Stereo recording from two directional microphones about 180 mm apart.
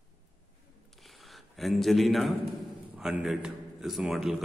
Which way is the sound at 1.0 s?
Centre (ahead or behind).